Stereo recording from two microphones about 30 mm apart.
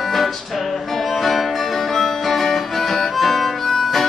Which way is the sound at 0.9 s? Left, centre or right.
Centre.